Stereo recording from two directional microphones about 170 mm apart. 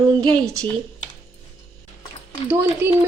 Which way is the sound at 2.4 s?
15° right (ahead or behind).